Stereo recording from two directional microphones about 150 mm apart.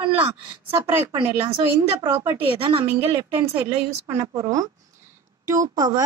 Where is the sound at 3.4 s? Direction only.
15° right (ahead or behind).